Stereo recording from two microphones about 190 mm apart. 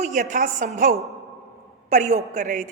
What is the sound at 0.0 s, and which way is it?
A woman's voice, 40° right (ahead or behind).